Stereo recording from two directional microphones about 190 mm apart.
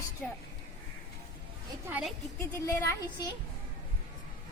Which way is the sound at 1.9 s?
5° right (ahead or behind).